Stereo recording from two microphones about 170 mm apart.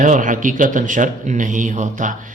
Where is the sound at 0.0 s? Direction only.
50° right (ahead or behind).